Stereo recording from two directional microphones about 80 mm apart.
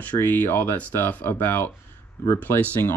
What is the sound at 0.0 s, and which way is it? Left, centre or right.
Speech, left.